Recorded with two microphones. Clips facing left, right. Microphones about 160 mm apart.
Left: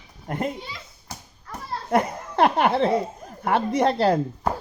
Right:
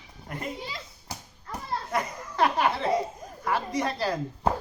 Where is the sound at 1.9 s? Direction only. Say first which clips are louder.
Left 12 dB; 55° left (ahead or behind).